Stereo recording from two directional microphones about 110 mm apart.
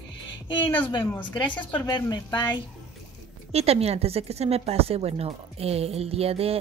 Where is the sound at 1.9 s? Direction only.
40° left (ahead or behind).